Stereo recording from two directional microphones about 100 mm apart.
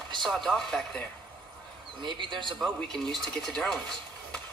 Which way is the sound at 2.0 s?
50° right (ahead or behind).